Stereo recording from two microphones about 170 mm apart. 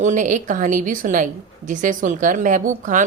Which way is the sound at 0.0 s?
50° right (ahead or behind).